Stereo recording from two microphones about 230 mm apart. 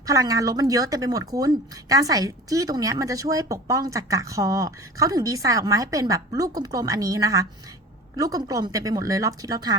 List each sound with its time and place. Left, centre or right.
0.0 s speech: centre